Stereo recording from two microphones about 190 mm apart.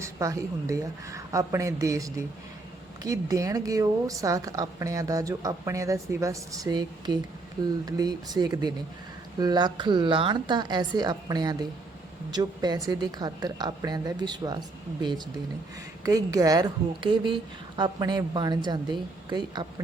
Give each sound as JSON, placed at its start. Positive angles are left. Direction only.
{"t": 0.0, "sound": "a woman's voice", "side_deg": -15}
{"t": 16.0, "sound": "a woman's voice", "side_deg": -20}